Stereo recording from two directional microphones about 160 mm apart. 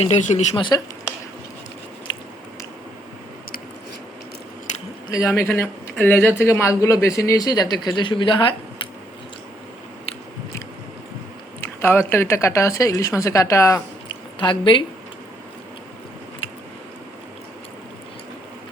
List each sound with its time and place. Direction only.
0.0 s speech: 45° left (ahead or behind)
5.1 s speech: 15° left (ahead or behind)
11.6 s speech: 15° left (ahead or behind)
14.3 s speech: 30° left (ahead or behind)